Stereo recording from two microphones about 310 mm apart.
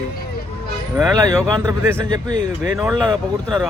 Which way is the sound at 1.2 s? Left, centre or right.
Centre.